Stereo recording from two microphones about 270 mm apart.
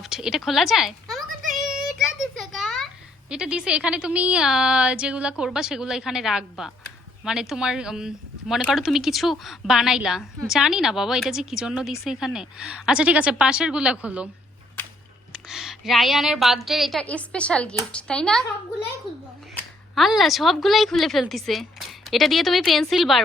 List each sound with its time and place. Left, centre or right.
0.0 s speech: centre
1.4 s child singing: right
1.6 s a child's voice: centre
15.3 s a child's voice: centre
19.5 s speech: centre